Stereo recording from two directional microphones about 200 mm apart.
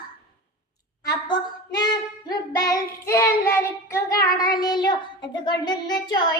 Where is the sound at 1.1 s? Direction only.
20° left (ahead or behind).